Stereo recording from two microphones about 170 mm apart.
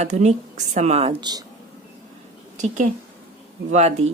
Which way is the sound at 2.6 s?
45° right (ahead or behind).